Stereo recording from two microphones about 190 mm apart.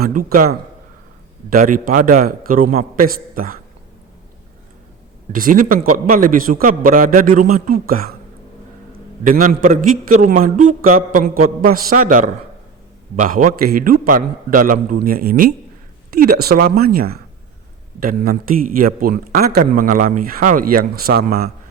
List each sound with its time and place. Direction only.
0.0 s speech: 50° right (ahead or behind)
5.3 s speech: 45° right (ahead or behind)
9.2 s speech: 45° right (ahead or behind)